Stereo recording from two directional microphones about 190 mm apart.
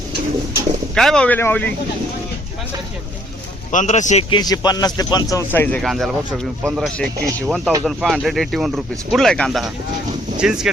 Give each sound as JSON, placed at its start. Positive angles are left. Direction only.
{"t": 0.9, "sound": "speech", "side_deg": 5}
{"t": 3.7, "sound": "a man's voice", "side_deg": 40}